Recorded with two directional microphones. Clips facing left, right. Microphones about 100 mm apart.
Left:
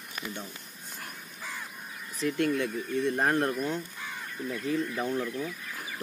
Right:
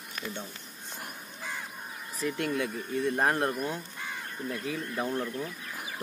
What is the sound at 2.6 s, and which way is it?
Speech, 10° right (ahead or behind).